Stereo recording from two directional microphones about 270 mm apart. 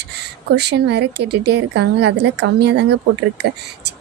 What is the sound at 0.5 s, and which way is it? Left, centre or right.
A woman's voice, right.